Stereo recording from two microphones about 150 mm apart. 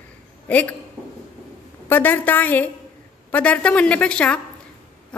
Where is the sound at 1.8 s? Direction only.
15° left (ahead or behind).